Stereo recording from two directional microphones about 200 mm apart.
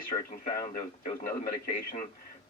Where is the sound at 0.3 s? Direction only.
40° left (ahead or behind).